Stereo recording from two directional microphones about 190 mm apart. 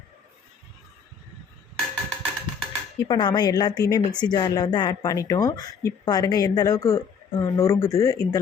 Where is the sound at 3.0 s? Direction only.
25° left (ahead or behind).